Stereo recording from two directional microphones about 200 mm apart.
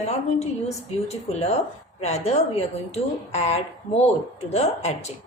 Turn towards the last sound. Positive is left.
turn(degrees=35)  # may be behind; listen again after turning